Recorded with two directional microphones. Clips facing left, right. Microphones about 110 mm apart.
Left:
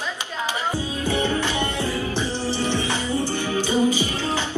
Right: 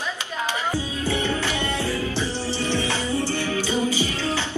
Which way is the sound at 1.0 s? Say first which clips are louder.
Left 3 dB; 15° left (ahead or behind).